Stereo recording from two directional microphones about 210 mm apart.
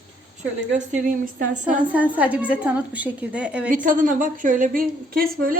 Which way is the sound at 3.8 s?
40° right (ahead or behind).